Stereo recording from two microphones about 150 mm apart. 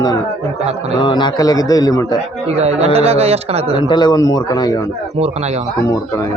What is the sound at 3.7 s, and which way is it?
A man's voice, 30° left (ahead or behind).